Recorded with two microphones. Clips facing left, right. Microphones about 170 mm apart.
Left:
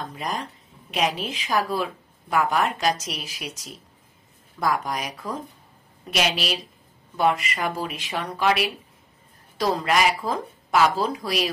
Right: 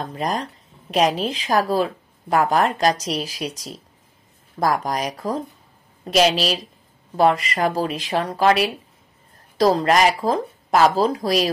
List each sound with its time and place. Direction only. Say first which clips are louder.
0.0 s speech: right 5 dB; 40° right (ahead or behind)